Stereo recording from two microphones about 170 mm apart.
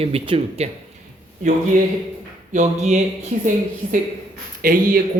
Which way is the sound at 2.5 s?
45° right (ahead or behind).